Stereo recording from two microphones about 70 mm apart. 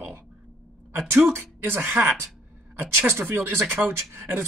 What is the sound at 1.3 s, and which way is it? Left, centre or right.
Speech, right.